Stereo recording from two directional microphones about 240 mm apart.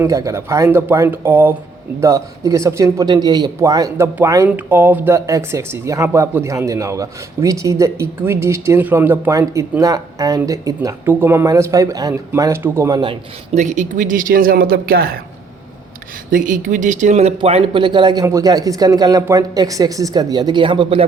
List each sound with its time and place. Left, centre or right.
0.0 s speech: centre; by 15.2 s right
16.3 s speech: right